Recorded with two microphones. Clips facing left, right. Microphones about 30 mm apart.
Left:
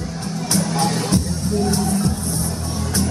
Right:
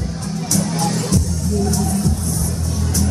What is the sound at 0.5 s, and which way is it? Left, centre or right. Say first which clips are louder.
Music: even; left.